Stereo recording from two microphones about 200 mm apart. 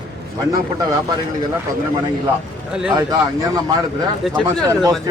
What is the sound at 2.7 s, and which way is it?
Speech, 5° right (ahead or behind).